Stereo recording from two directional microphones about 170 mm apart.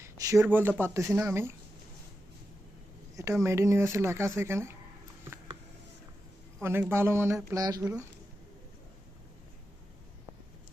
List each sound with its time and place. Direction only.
0.0 s speech: 15° right (ahead or behind)
3.2 s speech: 15° right (ahead or behind)
6.6 s speech: 15° right (ahead or behind)